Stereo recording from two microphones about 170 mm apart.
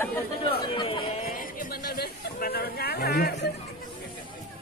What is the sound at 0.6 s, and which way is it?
Speech, 30° left (ahead or behind).